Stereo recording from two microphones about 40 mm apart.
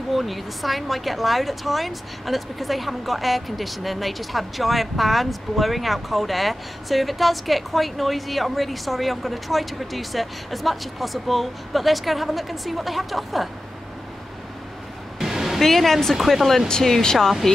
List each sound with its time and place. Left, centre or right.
0.1 s a woman's voice: centre
15.1 s a sound: centre
15.6 s a woman's voice: centre
16.6 s speech: centre